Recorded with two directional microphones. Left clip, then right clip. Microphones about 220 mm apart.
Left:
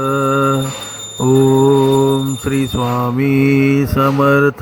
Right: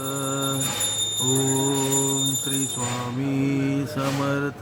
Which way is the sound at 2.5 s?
25° left (ahead or behind).